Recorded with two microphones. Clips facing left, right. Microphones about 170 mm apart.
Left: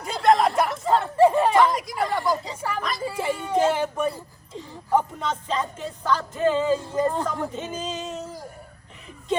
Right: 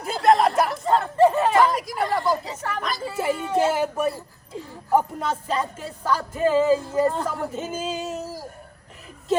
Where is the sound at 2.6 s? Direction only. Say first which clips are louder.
Left 1 dB; 10° left (ahead or behind).